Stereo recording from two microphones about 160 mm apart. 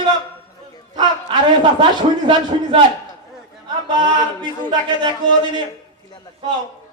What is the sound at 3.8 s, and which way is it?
Speech, 30° right (ahead or behind).